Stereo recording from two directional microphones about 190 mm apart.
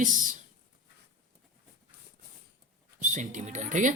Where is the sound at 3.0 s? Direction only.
40° right (ahead or behind).